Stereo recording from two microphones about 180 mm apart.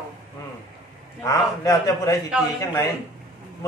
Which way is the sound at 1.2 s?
20° left (ahead or behind).